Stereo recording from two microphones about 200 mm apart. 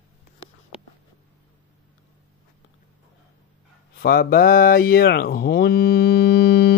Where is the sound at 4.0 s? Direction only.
50° left (ahead or behind).